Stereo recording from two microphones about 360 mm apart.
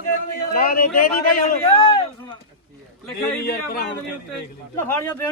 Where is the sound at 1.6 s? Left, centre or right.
Centre.